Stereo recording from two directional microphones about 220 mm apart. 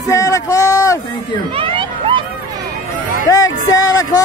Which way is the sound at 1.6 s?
25° right (ahead or behind).